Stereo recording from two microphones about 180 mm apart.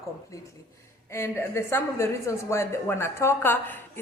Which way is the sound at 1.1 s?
15° left (ahead or behind).